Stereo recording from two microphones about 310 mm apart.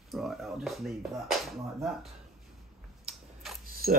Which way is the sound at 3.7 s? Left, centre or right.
Right.